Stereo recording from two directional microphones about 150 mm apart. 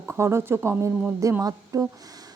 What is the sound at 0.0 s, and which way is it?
A woman's voice, 15° right (ahead or behind).